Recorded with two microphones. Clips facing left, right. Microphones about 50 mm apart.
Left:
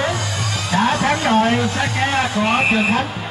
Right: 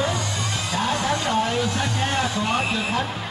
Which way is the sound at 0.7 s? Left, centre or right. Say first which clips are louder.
Left 7 dB; left.